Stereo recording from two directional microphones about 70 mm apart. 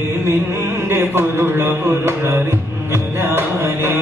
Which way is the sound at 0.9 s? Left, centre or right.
Right.